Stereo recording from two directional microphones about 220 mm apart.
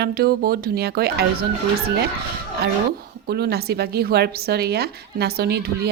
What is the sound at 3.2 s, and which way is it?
A woman's voice, 45° right (ahead or behind).